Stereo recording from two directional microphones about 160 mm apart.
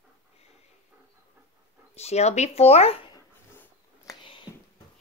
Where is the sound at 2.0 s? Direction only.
45° left (ahead or behind).